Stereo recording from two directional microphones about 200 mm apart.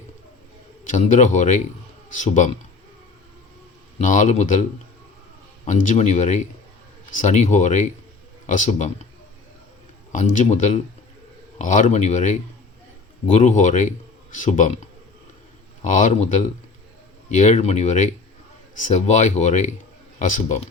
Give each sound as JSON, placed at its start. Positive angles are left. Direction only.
{"t": 0.9, "sound": "speech", "side_deg": 40}
{"t": 3.9, "sound": "speech", "side_deg": 40}
{"t": 5.6, "sound": "speech", "side_deg": 35}
{"t": 10.1, "sound": "speech", "side_deg": 40}